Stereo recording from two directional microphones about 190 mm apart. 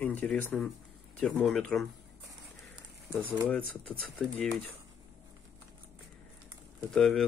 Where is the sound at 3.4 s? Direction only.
5° left (ahead or behind).